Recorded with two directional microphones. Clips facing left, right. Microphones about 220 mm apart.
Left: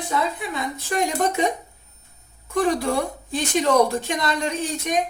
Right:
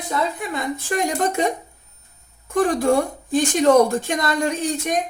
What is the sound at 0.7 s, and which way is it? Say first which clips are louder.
Speech: even; 50° right (ahead or behind).